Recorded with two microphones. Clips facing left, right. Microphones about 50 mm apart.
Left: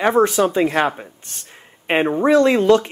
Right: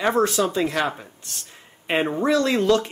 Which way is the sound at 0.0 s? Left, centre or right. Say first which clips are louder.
Left 5 dB; left.